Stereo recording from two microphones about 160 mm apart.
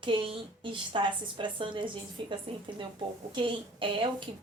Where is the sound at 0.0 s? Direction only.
30° right (ahead or behind).